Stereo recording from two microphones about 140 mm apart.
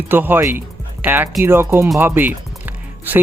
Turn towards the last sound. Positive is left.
turn(degrees=-15)  # may be behind; listen again after turning